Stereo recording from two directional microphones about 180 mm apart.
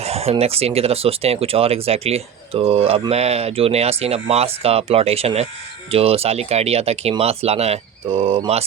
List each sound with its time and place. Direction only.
0.0 s speech: 35° right (ahead or behind)